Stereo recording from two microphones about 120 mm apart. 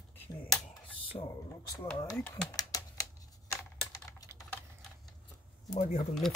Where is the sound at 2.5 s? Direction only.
30° left (ahead or behind).